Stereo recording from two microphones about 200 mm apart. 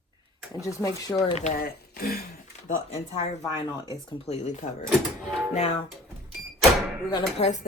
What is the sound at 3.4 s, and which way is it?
Speech, 20° left (ahead or behind).